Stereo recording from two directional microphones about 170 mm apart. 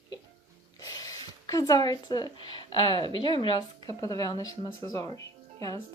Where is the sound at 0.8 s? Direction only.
20° left (ahead or behind).